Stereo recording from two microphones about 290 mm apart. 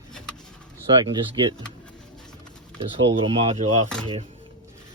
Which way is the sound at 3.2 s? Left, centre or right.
Centre.